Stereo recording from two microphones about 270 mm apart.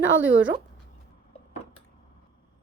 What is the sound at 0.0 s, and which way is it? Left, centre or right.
Speech, right.